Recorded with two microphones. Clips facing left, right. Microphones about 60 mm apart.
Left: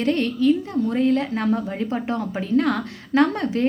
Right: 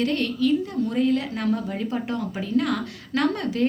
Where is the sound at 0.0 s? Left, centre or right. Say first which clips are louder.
Left 3 dB; left.